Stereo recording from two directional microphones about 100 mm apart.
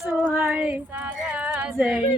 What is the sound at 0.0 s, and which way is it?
Female singing, 5° right (ahead or behind).